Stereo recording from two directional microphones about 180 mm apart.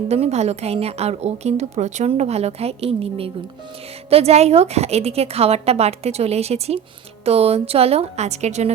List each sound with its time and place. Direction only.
0.1 s a woman's voice: 35° right (ahead or behind)